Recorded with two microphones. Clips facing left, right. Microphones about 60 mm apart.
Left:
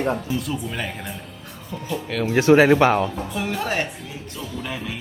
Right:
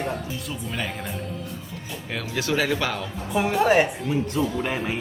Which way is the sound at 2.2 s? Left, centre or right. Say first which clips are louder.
Left 11 dB; left.